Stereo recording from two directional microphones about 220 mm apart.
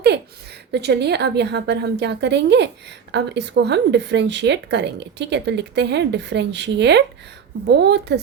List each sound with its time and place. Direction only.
0.7 s a woman's voice: 50° right (ahead or behind)